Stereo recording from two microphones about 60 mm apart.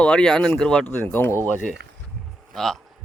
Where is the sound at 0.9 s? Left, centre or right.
Left.